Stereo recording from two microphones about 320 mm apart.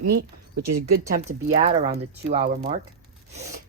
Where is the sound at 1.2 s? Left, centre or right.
Right.